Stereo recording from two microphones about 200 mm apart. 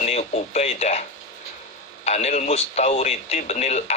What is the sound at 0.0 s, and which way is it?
Radio, 35° left (ahead or behind).